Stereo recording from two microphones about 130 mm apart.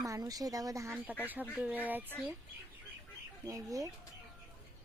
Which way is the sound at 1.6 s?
15° right (ahead or behind).